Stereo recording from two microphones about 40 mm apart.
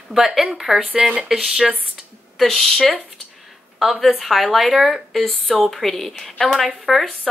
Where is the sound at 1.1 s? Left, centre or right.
Centre.